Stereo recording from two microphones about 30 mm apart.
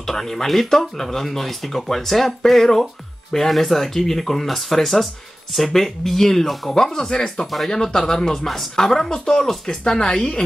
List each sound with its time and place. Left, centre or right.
0.0 s speech: centre